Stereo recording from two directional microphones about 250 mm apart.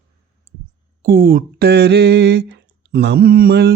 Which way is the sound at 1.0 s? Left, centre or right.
Right.